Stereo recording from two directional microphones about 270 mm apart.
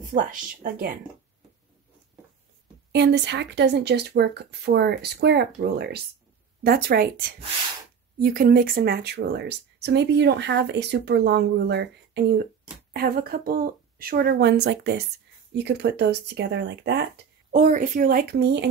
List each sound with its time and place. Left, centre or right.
0.0 s a woman's voice: right
2.9 s speech: right
17.5 s speech: right